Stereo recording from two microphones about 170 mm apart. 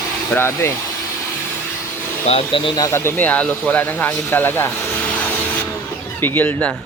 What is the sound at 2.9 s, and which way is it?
Speech, 15° left (ahead or behind).